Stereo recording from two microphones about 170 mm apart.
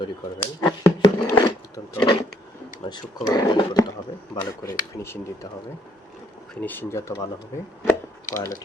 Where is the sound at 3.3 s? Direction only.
20° left (ahead or behind).